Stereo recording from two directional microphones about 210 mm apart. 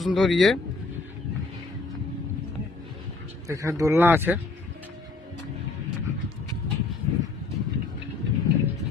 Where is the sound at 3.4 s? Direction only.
15° right (ahead or behind).